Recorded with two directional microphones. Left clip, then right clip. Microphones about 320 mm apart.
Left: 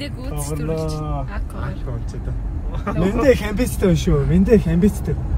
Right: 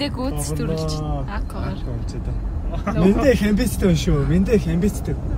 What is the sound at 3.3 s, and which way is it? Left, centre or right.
Speech, left.